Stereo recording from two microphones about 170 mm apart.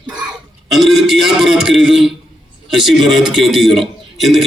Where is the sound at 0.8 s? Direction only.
Centre (ahead or behind).